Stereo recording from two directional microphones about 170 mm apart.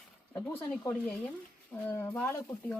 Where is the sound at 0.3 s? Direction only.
10° left (ahead or behind).